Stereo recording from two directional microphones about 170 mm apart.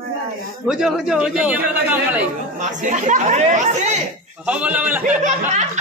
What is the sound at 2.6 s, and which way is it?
Speech, 45° right (ahead or behind).